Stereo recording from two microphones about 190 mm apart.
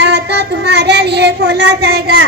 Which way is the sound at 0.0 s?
65° right (ahead or behind).